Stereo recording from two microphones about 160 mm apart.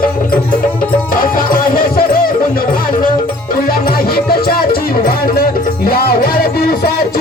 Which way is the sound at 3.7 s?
70° left (ahead or behind).